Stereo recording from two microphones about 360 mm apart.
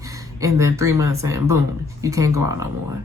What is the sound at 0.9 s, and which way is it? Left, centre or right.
Speech, right.